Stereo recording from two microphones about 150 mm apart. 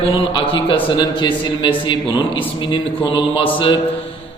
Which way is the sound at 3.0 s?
35° left (ahead or behind).